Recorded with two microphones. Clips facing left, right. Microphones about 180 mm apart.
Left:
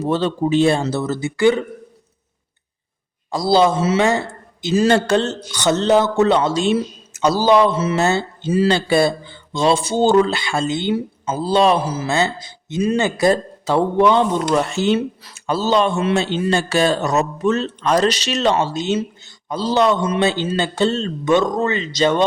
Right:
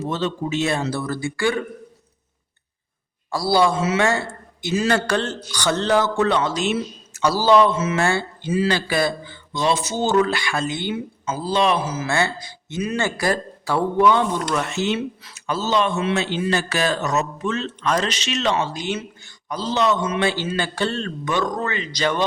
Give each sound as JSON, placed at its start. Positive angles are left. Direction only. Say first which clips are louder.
{"t": 0.0, "sound": "speech", "louder": "left 6 dB", "side_deg": 35}
{"t": 3.3, "sound": "speech", "louder": "left 3 dB", "side_deg": 20}
{"t": 4.7, "sound": "speech", "louder": "left 5 dB", "side_deg": 30}
{"t": 7.2, "sound": "a man's voice", "louder": "left 2 dB", "side_deg": 20}
{"t": 7.7, "sound": "speech", "louder": "left 3 dB", "side_deg": 30}
{"t": 12.0, "sound": "speech", "louder": "left 3 dB", "side_deg": 20}
{"t": 18.8, "sound": "speech", "louder": "left 7 dB", "side_deg": 25}